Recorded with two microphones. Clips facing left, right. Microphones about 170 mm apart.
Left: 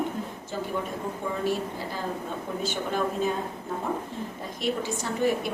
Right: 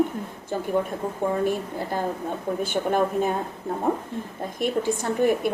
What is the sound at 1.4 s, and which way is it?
Speech, 55° right (ahead or behind).